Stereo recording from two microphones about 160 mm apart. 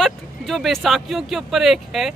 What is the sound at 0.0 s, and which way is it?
Speech, centre (ahead or behind).